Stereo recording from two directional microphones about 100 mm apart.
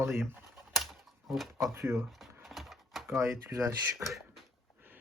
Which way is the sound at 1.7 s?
25° right (ahead or behind).